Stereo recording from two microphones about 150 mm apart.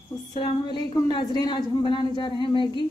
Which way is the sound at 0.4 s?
30° left (ahead or behind).